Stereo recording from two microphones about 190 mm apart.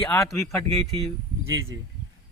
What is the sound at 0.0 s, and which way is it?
Speech, 15° left (ahead or behind).